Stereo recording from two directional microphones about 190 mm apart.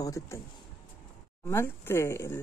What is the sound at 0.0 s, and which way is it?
Speech, 15° left (ahead or behind).